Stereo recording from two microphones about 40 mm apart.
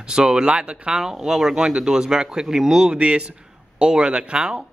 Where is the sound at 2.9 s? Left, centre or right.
Right.